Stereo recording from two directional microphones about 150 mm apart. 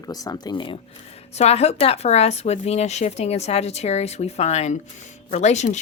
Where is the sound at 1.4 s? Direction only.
45° left (ahead or behind).